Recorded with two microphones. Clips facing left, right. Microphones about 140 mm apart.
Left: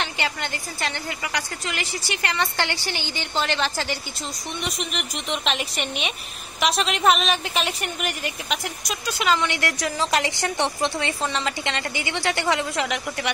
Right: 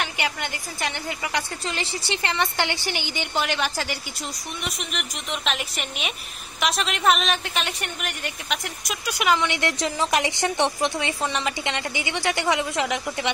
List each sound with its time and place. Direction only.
0.0 s a woman's voice: 15° right (ahead or behind)
1.7 s a woman's voice: 30° right (ahead or behind)
2.3 s a woman's voice: 15° right (ahead or behind); by 8.9 s centre (ahead or behind)
9.0 s a woman's voice: 15° right (ahead or behind)